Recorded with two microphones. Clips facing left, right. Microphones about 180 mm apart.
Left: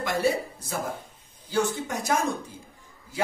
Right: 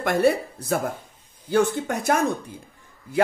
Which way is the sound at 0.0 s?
55° right (ahead or behind).